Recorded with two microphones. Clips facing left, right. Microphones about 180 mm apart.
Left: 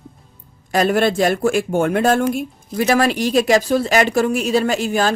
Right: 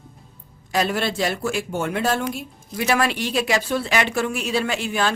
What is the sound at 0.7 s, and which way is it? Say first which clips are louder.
Speech: left 7 dB; 50° left (ahead or behind).